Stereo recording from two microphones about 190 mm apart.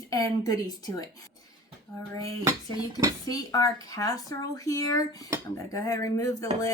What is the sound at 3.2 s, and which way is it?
A woman's voice, 20° left (ahead or behind).